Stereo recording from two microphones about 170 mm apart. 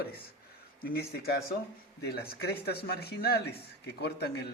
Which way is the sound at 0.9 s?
70° left (ahead or behind).